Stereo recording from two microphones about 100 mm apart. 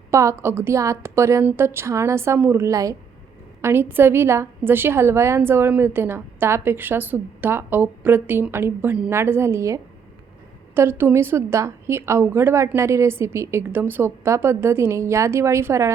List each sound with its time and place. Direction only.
0.1 s a woman's voice: 30° right (ahead or behind)
3.6 s a woman's voice: 25° right (ahead or behind)